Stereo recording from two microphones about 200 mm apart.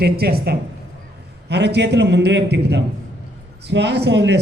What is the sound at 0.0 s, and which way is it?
Speech, 55° right (ahead or behind).